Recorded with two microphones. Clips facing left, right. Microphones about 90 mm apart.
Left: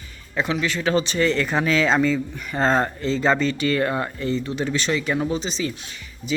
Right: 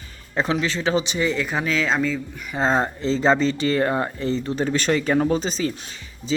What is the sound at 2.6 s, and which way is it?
Speech, 15° right (ahead or behind).